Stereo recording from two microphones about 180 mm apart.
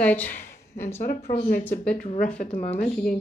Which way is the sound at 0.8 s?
45° left (ahead or behind).